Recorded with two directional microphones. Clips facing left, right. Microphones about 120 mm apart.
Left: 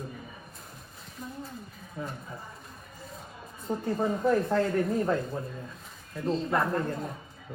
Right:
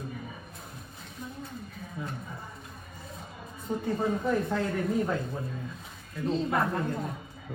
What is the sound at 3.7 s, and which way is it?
Speech, centre (ahead or behind).